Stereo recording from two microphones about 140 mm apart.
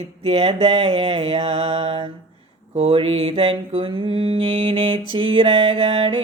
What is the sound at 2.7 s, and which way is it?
Mantra, 45° right (ahead or behind).